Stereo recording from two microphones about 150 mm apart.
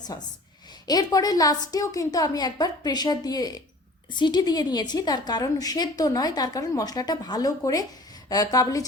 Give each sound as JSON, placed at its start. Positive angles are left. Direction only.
{"t": 0.1, "sound": "a woman's voice", "side_deg": 25}